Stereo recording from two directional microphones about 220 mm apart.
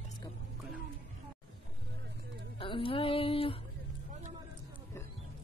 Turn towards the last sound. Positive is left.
turn(degrees=25)  # may be behind; listen again after turning